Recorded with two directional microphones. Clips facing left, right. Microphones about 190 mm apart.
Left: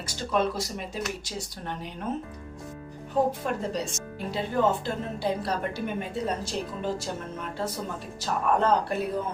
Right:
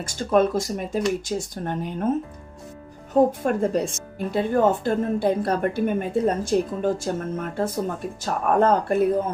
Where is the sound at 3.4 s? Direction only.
50° right (ahead or behind).